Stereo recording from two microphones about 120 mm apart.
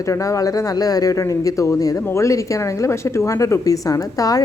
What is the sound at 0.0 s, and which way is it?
A woman's voice, 25° left (ahead or behind).